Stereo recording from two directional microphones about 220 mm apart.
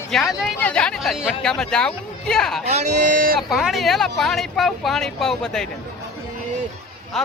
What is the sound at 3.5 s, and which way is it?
Speech, centre (ahead or behind).